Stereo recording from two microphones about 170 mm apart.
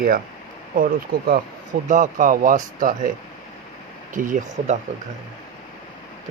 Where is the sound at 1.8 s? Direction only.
50° right (ahead or behind).